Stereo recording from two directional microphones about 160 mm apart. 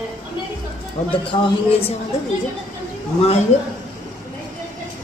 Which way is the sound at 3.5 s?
40° left (ahead or behind).